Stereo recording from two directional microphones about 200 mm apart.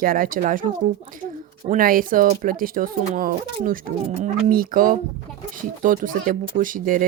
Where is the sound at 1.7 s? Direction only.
45° right (ahead or behind).